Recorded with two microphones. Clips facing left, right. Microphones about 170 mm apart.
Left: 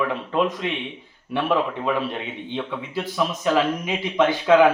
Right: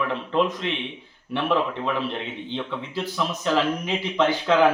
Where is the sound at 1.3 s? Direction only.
10° left (ahead or behind).